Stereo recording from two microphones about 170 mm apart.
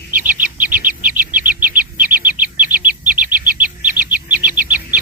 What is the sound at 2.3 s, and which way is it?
Bird, 55° right (ahead or behind).